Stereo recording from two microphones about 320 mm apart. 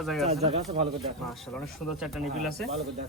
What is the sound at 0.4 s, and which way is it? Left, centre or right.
Speech, centre.